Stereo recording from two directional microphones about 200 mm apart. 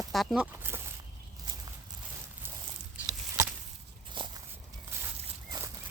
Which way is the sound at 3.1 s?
15° right (ahead or behind).